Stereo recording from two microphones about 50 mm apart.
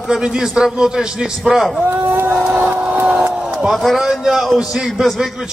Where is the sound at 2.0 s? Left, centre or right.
Right.